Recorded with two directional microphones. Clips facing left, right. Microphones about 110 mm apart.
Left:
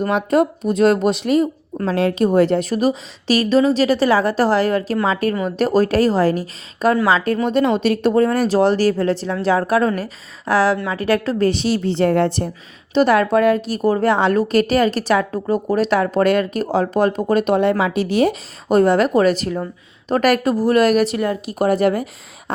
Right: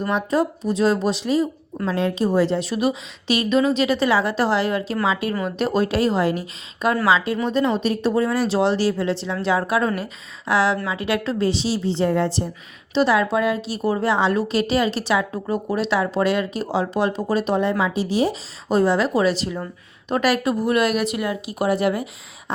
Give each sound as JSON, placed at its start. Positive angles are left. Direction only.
{"t": 0.1, "sound": "a woman's voice", "side_deg": 60}
{"t": 7.5, "sound": "a woman's voice", "side_deg": 65}
{"t": 12.9, "sound": "a woman's voice", "side_deg": 50}